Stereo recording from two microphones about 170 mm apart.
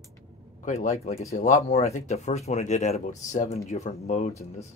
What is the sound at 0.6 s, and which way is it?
Speech, 40° left (ahead or behind).